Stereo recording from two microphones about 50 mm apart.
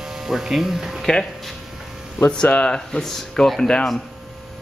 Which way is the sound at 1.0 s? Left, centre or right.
Centre.